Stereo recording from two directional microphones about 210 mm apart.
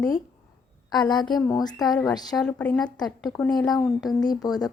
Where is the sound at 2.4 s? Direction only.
5° left (ahead or behind).